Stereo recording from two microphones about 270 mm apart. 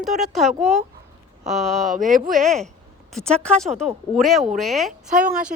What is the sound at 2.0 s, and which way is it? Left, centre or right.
Speech, right.